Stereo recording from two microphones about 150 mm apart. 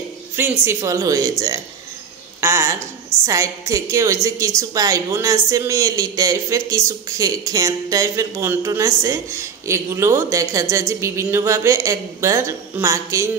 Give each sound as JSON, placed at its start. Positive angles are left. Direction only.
{"t": 0.4, "sound": "a woman's voice", "side_deg": -15}
{"t": 2.4, "sound": "a woman's voice", "side_deg": -15}